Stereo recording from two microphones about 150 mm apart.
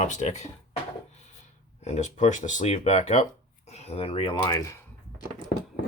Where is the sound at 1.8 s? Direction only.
45° left (ahead or behind); by 4.8 s 20° left (ahead or behind).